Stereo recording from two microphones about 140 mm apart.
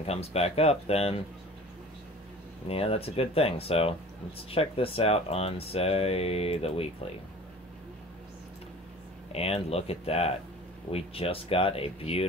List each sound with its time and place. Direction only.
0.0 s speech: 45° left (ahead or behind)
2.7 s speech: 45° left (ahead or behind)
9.3 s speech: 45° left (ahead or behind)